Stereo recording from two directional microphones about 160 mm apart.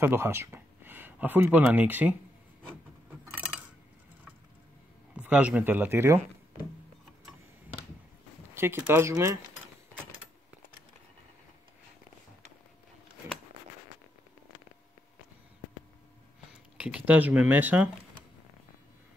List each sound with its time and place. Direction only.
0.0 s speech: 15° right (ahead or behind)
5.1 s speech: 10° right (ahead or behind)
8.5 s speech: 15° right (ahead or behind)
16.7 s speech: 10° right (ahead or behind)